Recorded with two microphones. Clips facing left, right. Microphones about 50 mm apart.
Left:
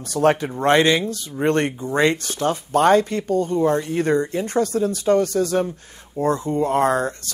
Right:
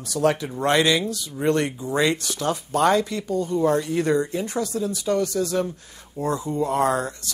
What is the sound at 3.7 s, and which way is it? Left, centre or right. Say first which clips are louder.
Speech: left 1 dB; left.